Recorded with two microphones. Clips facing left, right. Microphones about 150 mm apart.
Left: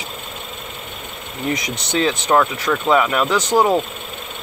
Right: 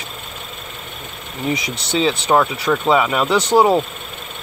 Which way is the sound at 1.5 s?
10° right (ahead or behind).